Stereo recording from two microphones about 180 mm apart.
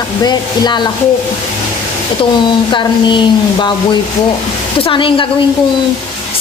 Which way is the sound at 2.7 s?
25° left (ahead or behind).